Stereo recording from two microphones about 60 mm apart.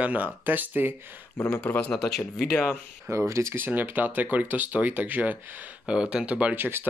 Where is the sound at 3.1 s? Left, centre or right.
Right.